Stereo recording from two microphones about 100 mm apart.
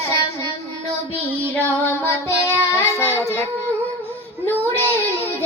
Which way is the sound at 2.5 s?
25° left (ahead or behind).